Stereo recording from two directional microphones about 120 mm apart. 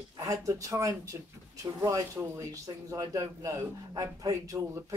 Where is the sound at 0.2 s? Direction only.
25° right (ahead or behind).